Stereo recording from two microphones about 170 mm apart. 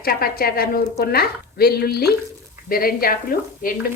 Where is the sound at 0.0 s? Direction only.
60° left (ahead or behind).